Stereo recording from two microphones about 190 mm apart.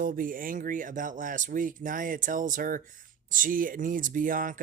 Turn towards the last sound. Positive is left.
turn(degrees=-45)  # may be behind; listen again after turning